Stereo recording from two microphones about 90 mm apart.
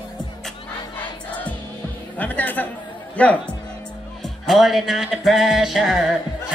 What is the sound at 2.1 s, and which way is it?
Speech, 20° left (ahead or behind).